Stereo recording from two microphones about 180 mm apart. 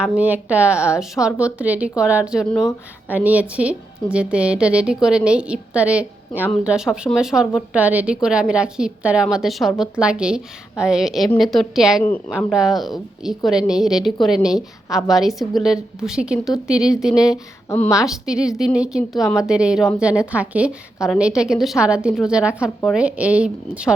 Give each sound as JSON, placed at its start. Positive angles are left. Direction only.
{"t": 0.0, "sound": "a woman's voice", "side_deg": -5}
{"t": 17.7, "sound": "a woman's voice", "side_deg": 15}
{"t": 18.0, "sound": "a woman's voice", "side_deg": -5}